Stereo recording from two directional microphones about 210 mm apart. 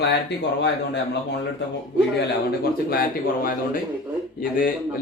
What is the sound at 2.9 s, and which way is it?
Speech, 45° left (ahead or behind).